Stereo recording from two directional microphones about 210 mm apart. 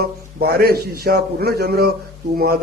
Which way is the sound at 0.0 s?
50° right (ahead or behind).